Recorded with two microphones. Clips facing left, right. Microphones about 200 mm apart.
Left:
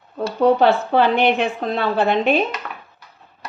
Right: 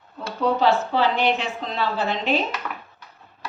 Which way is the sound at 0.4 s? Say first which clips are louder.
Left 5 dB; 60° left (ahead or behind).